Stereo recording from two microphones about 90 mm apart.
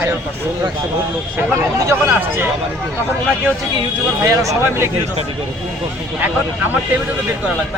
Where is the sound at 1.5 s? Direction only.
35° right (ahead or behind).